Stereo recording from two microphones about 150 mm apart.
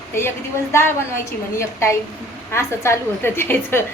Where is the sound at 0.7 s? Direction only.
15° left (ahead or behind).